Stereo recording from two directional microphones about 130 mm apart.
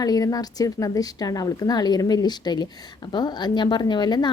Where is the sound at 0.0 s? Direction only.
30° left (ahead or behind).